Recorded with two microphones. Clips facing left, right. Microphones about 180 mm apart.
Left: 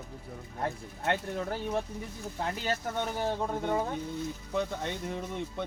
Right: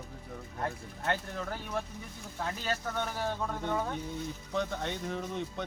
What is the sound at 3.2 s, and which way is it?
Speech, 20° left (ahead or behind).